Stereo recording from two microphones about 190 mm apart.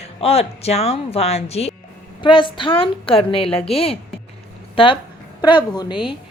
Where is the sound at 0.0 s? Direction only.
30° left (ahead or behind).